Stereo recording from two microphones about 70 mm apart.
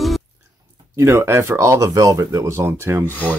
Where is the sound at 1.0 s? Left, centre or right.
Right.